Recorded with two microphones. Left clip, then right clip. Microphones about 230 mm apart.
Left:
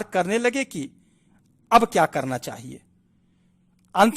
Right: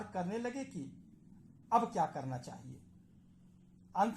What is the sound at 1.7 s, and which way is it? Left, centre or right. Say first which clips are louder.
Speech: left 15 dB; left.